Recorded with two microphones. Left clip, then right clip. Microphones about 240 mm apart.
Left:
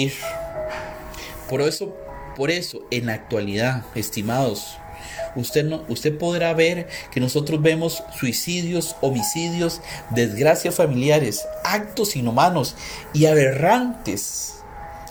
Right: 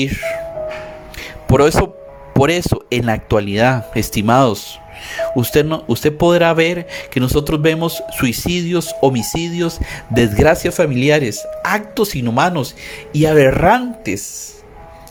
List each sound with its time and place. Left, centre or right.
0.0 s speech: right
1.5 s speech: right